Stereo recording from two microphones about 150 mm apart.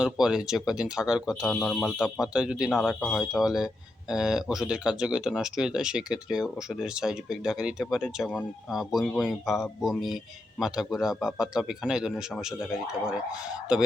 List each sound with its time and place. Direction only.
0.0 s speech: 5° right (ahead or behind)